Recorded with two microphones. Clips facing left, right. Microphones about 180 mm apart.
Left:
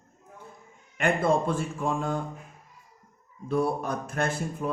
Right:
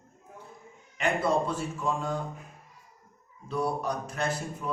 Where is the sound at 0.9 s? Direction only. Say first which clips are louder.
Left 2 dB; 50° left (ahead or behind).